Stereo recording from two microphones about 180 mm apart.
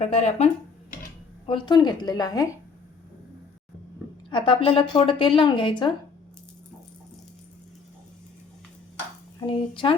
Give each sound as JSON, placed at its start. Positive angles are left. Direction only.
{"t": 0.0, "sound": "speech", "side_deg": 40}
{"t": 1.5, "sound": "a woman's voice", "side_deg": 25}
{"t": 4.3, "sound": "a woman's voice", "side_deg": 25}
{"t": 9.5, "sound": "a woman's voice", "side_deg": 30}